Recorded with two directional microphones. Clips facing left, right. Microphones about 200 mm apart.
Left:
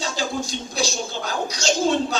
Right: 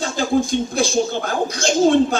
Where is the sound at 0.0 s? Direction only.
55° right (ahead or behind).